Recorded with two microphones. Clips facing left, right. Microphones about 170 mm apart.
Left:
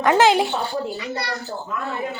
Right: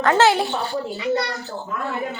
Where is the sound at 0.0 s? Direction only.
15° left (ahead or behind).